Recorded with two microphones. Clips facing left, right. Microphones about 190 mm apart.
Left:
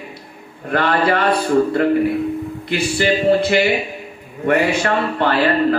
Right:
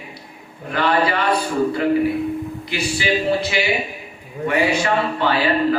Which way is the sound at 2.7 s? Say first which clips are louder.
Left 4 dB; 55° left (ahead or behind).